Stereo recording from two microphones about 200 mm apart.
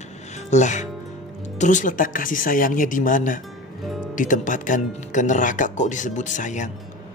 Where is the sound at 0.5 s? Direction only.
35° left (ahead or behind).